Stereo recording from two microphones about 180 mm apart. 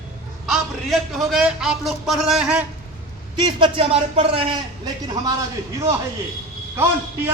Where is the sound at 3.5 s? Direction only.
30° right (ahead or behind).